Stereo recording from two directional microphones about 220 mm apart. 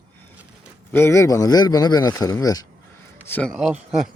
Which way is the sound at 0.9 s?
10° left (ahead or behind).